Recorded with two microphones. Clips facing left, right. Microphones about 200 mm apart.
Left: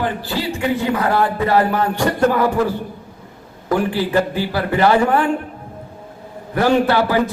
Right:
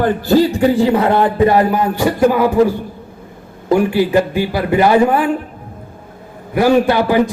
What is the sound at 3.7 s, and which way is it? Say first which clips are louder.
A man's voice: right 5 dB; 15° right (ahead or behind).